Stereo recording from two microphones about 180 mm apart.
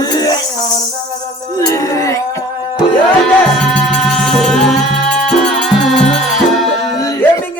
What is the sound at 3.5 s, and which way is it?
Music, 5° left (ahead or behind).